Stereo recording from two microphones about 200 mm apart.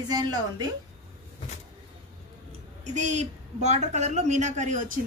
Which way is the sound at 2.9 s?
35° right (ahead or behind).